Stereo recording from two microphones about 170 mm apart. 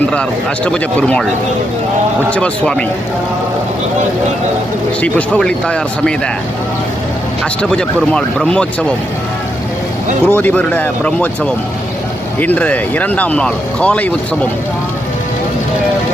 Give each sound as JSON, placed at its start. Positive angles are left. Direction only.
{"t": 0.1, "sound": "speech", "side_deg": 5}
{"t": 2.3, "sound": "speech", "side_deg": 5}
{"t": 4.9, "sound": "speech", "side_deg": 5}
{"t": 7.6, "sound": "speech", "side_deg": 5}
{"t": 10.2, "sound": "speech", "side_deg": 10}